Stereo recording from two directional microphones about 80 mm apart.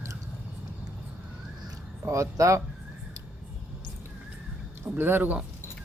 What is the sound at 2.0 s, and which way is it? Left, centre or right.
Speech, right.